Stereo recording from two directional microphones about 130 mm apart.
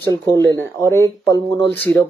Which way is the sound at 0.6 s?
20° left (ahead or behind).